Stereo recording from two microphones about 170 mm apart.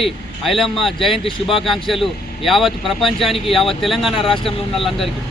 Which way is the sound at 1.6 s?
Centre (ahead or behind).